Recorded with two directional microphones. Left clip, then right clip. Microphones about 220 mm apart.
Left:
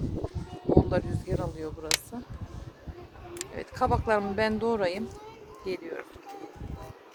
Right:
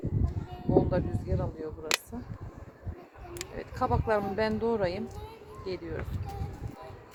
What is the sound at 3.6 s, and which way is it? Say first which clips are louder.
Speech: left 3 dB; 30° left (ahead or behind).